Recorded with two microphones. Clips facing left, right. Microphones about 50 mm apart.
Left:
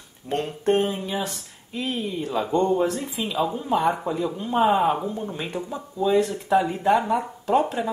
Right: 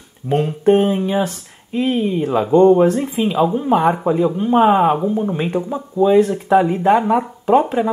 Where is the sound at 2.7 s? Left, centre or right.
Right.